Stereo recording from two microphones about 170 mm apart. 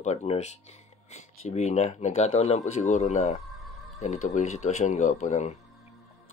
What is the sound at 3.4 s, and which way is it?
Music, centre (ahead or behind).